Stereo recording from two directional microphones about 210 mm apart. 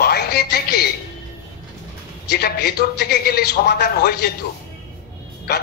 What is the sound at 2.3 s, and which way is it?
A man's voice, 50° left (ahead or behind).